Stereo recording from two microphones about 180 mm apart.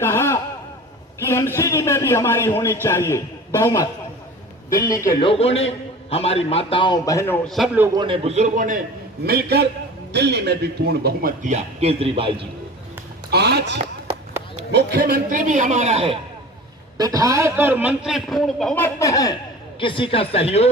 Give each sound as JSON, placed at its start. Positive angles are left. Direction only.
{"t": 0.0, "sound": "a man's voice", "side_deg": 15}
{"t": 5.2, "sound": "a man's voice", "side_deg": 30}
{"t": 7.4, "sound": "a man's voice", "side_deg": 0}
{"t": 7.9, "sound": "a man's voice", "side_deg": -30}
{"t": 9.2, "sound": "a man's voice", "side_deg": -65}
{"t": 13.3, "sound": "a man's voice", "side_deg": -65}
{"t": 17.0, "sound": "a man's voice", "side_deg": -20}
{"t": 19.8, "sound": "speech", "side_deg": 30}